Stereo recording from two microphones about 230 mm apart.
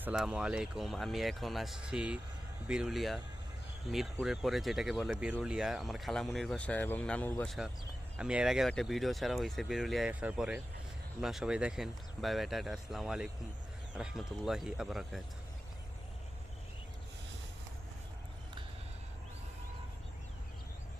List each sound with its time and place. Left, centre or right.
0.0 s speech: centre